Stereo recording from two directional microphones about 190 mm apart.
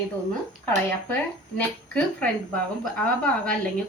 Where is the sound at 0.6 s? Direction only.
10° left (ahead or behind).